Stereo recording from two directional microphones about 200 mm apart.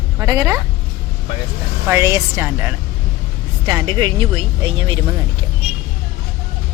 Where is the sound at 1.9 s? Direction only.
15° right (ahead or behind).